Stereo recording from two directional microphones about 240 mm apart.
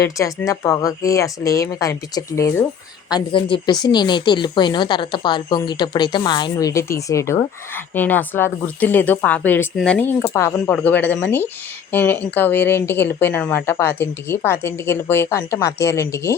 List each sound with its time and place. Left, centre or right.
0.0 s speech: centre